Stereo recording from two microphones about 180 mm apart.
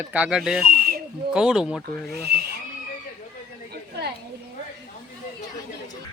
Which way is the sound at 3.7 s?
65° right (ahead or behind).